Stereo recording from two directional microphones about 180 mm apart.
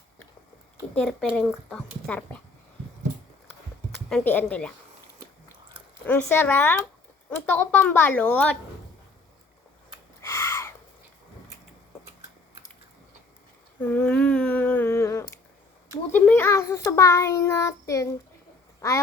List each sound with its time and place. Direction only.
0.9 s a child's voice: 5° left (ahead or behind)
4.1 s a child's voice: 10° left (ahead or behind)
6.1 s a child's voice: 10° left (ahead or behind)
10.2 s a sound: 15° left (ahead or behind)
13.8 s humming: 10° left (ahead or behind)
16.1 s a child's voice: 10° left (ahead or behind)